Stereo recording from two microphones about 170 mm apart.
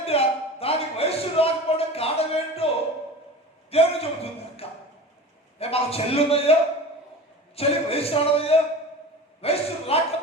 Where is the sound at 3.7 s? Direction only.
35° left (ahead or behind).